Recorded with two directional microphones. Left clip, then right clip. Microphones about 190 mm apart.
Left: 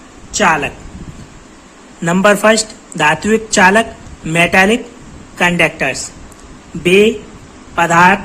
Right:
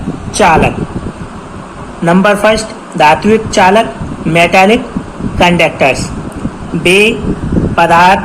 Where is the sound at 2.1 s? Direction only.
45° left (ahead or behind).